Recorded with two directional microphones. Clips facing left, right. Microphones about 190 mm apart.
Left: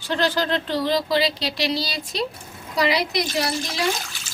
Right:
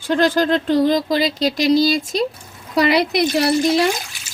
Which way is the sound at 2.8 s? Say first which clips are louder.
Right 6 dB; 60° right (ahead or behind).